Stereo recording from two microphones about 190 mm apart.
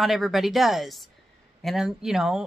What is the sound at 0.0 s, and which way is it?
Speech, centre (ahead or behind).